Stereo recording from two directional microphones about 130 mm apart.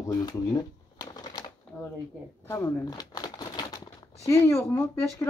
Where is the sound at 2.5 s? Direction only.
25° left (ahead or behind).